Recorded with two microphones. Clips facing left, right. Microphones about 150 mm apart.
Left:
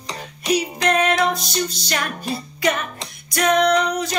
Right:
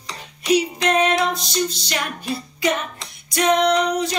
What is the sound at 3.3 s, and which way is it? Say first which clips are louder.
Music: even; 25° right (ahead or behind).